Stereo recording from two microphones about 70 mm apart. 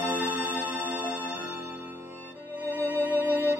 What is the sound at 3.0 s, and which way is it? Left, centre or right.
Music, right.